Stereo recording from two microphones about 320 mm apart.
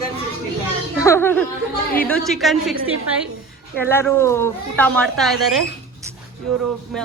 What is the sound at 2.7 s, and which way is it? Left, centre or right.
Speech, right.